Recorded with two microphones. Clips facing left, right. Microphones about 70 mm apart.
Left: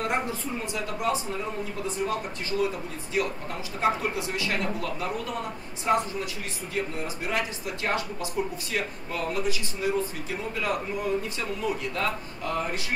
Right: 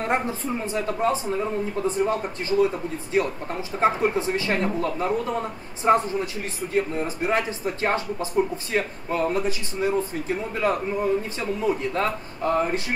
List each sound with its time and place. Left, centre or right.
0.0 s speech: right